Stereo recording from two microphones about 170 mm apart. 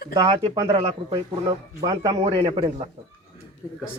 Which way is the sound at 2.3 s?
30° right (ahead or behind).